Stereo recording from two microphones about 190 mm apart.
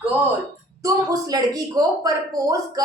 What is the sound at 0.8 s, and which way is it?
A woman's voice, 20° right (ahead or behind).